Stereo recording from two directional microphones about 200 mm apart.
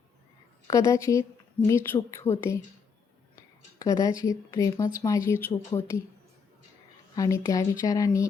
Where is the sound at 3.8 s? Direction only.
15° left (ahead or behind).